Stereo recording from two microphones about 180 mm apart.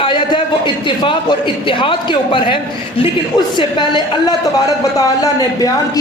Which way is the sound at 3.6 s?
25° left (ahead or behind).